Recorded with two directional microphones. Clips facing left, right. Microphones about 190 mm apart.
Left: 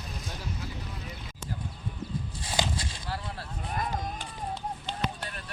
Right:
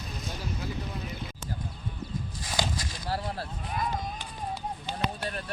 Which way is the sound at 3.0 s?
35° right (ahead or behind).